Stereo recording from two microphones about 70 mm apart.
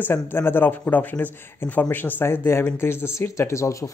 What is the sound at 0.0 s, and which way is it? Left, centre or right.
A man's voice, left.